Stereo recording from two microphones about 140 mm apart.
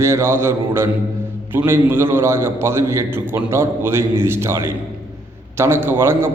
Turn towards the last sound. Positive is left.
turn(degrees=-15)  # may be behind; listen again after turning